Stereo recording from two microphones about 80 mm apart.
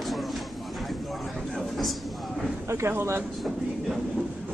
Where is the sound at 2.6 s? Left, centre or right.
Right.